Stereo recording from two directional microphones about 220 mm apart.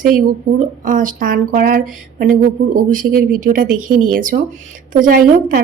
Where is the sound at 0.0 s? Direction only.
40° right (ahead or behind).